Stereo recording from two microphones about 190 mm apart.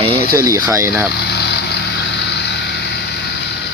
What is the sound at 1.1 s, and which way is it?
Vehicle, 60° left (ahead or behind).